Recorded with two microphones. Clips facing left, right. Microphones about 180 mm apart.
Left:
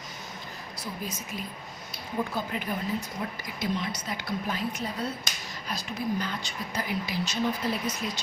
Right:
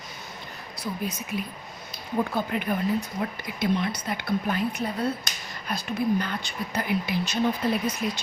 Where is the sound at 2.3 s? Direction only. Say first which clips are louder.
Right 5 dB; 60° right (ahead or behind).